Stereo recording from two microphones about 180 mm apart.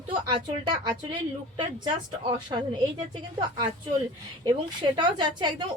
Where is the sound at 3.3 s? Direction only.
25° right (ahead or behind).